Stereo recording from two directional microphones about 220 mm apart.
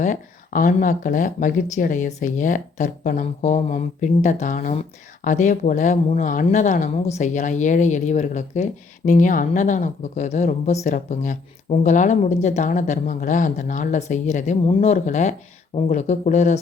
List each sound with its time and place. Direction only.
0.0 s speech: 35° left (ahead or behind)